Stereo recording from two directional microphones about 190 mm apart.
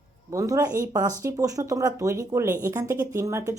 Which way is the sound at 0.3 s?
15° right (ahead or behind).